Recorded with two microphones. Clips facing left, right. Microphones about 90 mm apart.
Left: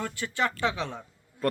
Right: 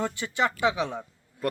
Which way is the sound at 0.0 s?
20° right (ahead or behind).